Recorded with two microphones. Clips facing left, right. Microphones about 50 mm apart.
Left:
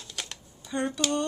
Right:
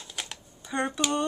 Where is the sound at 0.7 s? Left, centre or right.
Centre.